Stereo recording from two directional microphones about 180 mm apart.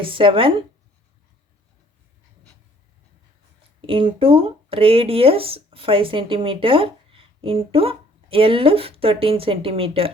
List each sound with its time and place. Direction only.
0.0 s speech: 30° right (ahead or behind)
3.8 s speech: 30° right (ahead or behind)